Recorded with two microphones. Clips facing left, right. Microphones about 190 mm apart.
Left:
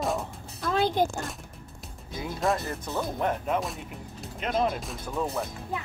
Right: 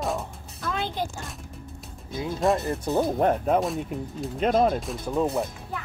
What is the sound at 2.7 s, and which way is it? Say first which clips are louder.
Speech: right 7 dB; 30° right (ahead or behind).